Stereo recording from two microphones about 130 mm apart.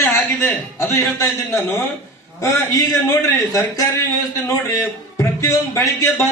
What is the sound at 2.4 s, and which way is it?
A man's voice, 25° left (ahead or behind).